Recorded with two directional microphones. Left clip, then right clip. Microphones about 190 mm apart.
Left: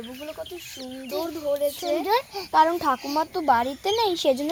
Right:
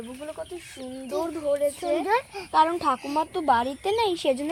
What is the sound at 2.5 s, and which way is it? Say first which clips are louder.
Speech: left 2 dB; 35° left (ahead or behind).